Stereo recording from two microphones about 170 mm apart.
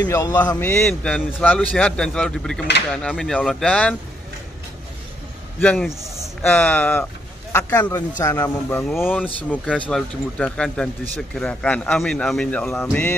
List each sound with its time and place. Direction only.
0.0 s speech: 20° left (ahead or behind)
5.6 s a sound: 5° left (ahead or behind)
6.4 s speech: 10° left (ahead or behind)